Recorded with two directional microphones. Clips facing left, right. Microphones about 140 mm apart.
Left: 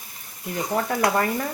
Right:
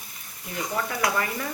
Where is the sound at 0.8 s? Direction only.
40° left (ahead or behind).